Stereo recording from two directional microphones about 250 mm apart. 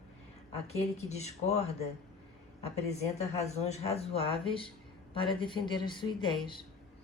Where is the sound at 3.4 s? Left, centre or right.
Left.